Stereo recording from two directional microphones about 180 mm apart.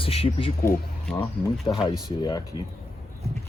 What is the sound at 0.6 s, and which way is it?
Speech, 15° left (ahead or behind).